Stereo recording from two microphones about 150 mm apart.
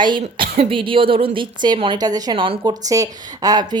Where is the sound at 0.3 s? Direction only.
35° right (ahead or behind).